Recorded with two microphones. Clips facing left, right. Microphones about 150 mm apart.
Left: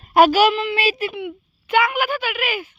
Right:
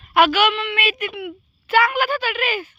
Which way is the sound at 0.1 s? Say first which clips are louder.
Left 3 dB; 40° left (ahead or behind).